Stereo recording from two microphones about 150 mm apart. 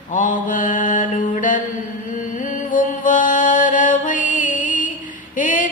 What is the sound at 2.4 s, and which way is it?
Music, 60° left (ahead or behind).